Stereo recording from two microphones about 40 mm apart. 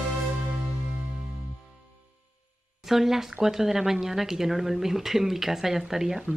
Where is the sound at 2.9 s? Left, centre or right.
Centre.